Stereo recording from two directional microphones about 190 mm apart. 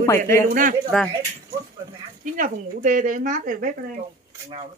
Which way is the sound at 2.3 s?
45° right (ahead or behind).